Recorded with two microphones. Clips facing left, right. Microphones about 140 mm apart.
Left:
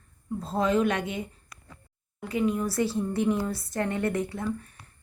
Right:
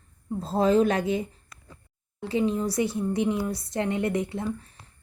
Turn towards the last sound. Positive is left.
turn(degrees=-25)  # may be behind; listen again after turning